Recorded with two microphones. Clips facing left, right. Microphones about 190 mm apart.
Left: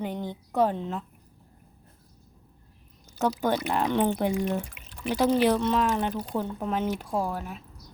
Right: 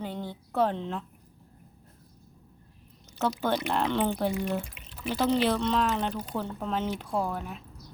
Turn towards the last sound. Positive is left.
turn(degrees=5)  # may be behind; listen again after turning